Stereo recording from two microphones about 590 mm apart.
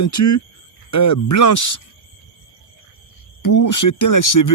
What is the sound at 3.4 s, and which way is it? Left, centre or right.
Speech, left.